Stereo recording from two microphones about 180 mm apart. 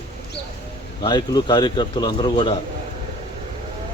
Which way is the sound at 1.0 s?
25° left (ahead or behind).